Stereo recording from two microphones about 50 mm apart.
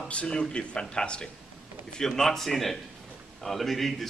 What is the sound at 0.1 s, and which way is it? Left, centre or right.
A man's voice, centre.